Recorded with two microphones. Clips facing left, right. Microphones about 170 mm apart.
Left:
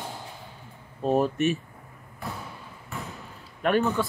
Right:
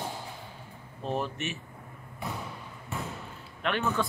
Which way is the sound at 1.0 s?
40° left (ahead or behind).